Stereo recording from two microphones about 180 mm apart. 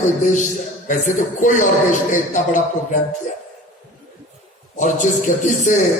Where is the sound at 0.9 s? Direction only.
45° left (ahead or behind).